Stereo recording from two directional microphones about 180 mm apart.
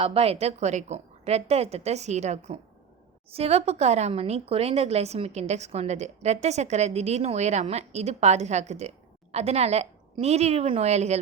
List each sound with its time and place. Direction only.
0.0 s speech: 35° right (ahead or behind)